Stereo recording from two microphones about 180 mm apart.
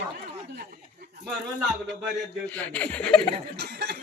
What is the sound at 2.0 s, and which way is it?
Speech, 10° left (ahead or behind).